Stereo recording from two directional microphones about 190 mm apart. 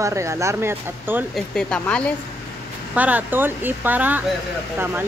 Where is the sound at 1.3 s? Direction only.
5° left (ahead or behind).